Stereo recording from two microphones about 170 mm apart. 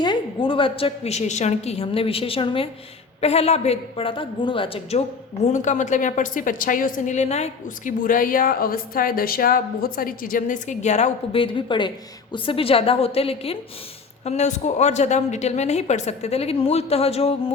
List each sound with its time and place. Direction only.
0.0 s a woman's voice: 30° left (ahead or behind)
5.5 s a woman's voice: 45° left (ahead or behind)